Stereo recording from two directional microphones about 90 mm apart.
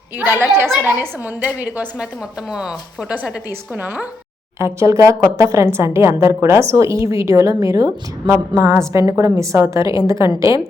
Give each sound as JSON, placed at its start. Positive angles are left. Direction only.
{"t": 0.2, "sound": "a woman's voice", "side_deg": -25}
{"t": 3.8, "sound": "a woman's voice", "side_deg": -20}
{"t": 4.6, "sound": "a woman's voice", "side_deg": -35}